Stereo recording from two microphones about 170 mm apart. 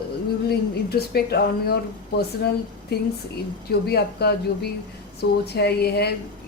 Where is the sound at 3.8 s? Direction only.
70° left (ahead or behind).